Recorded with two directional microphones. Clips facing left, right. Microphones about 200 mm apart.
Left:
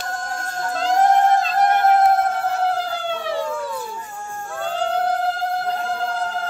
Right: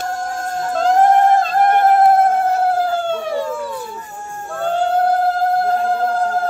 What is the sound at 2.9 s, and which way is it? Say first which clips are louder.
Emergency vehicle: right 5 dB; 45° right (ahead or behind).